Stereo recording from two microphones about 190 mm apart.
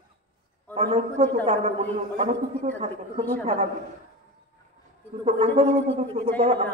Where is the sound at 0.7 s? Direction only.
35° right (ahead or behind).